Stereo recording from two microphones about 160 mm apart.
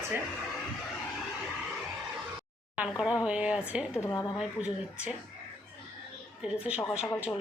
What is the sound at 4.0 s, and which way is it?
Speech, 15° left (ahead or behind).